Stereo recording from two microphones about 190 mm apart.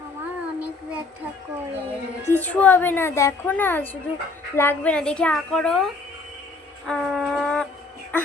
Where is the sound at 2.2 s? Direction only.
10° left (ahead or behind).